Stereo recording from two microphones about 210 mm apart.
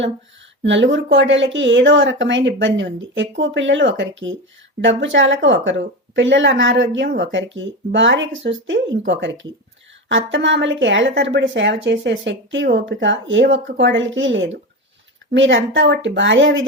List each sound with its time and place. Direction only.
0.6 s speech: 60° right (ahead or behind)